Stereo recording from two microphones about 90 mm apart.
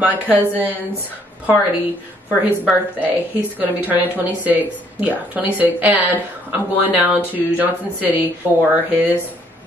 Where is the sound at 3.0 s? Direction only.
20° right (ahead or behind).